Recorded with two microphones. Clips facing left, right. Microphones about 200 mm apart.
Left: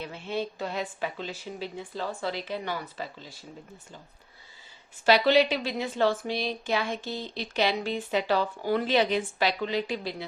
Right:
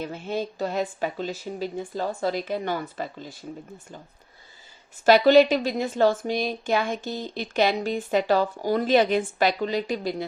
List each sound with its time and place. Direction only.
0.0 s a woman's voice: 45° right (ahead or behind)
5.0 s a woman's voice: 45° right (ahead or behind)